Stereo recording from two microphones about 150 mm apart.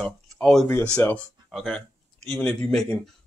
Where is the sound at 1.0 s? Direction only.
15° left (ahead or behind).